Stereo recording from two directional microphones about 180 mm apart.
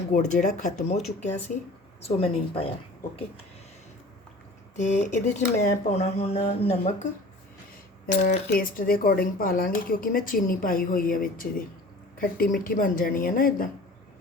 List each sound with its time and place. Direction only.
0.1 s speech: 45° left (ahead or behind)
2.0 s speech: 35° left (ahead or behind)
4.8 s speech: 45° left (ahead or behind)